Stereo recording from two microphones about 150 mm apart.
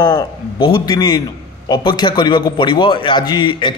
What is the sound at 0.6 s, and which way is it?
A man's voice, 35° left (ahead or behind).